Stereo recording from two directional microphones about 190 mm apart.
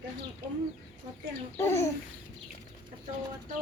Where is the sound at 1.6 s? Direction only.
15° left (ahead or behind).